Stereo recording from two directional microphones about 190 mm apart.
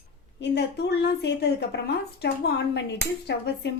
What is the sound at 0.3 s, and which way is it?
Speech, 65° left (ahead or behind).